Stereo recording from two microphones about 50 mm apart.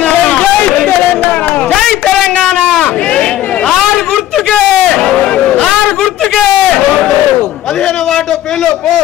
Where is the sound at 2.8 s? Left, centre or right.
Centre.